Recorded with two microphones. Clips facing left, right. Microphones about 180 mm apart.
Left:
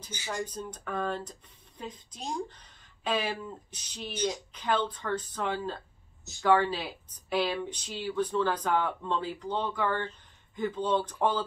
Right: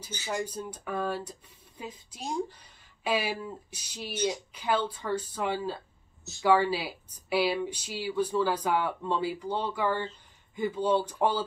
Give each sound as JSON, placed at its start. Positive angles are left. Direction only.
{"t": 0.3, "sound": "speech", "side_deg": -10}